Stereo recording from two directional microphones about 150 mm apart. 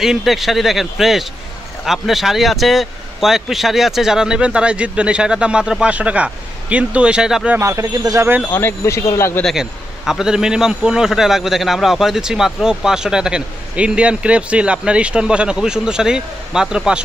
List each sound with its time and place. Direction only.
0.0 s a man's voice: centre (ahead or behind)
7.6 s speech: 20° right (ahead or behind)
8.5 s speech: 15° left (ahead or behind)
9.4 s a man's voice: centre (ahead or behind)